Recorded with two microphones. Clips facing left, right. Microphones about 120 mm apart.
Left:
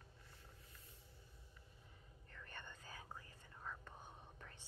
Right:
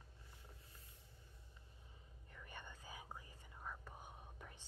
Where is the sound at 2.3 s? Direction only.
10° right (ahead or behind).